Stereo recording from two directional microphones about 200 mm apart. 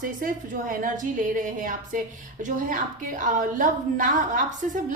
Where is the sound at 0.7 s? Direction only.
40° right (ahead or behind).